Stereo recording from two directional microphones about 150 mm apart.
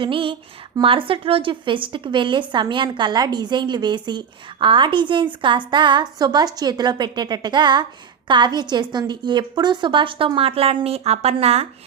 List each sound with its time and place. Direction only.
0.0 s a woman's voice: 35° right (ahead or behind)